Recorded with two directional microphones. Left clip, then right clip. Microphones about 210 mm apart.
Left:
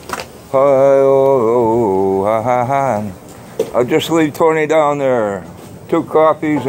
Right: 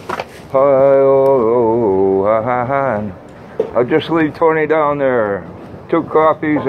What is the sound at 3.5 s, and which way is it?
Speech, 55° left (ahead or behind).